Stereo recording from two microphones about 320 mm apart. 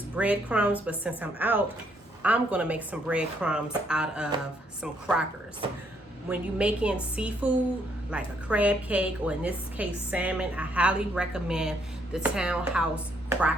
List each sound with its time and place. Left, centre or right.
0.2 s a woman's voice: centre
6.2 s a woman's voice: centre